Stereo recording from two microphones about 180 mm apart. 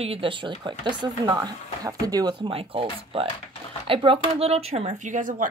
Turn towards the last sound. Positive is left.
turn(degrees=-45)  # may be behind; listen again after turning